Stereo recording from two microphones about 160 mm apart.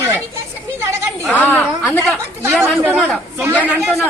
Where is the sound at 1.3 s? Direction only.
10° left (ahead or behind).